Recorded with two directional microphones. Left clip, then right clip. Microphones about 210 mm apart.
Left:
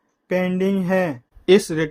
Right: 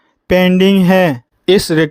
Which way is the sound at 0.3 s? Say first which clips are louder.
Right 10 dB; 45° right (ahead or behind).